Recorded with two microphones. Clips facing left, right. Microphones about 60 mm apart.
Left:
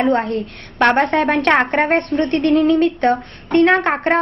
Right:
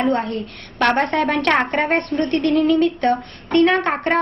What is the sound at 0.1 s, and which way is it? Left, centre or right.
Speech, left.